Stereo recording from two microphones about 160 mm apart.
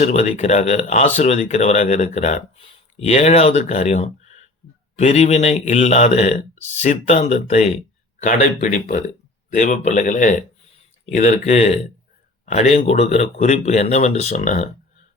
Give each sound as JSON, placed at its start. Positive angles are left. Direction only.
{"t": 0.0, "sound": "speech", "side_deg": 45}